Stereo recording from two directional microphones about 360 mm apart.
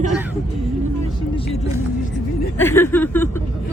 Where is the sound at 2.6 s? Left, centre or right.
Centre.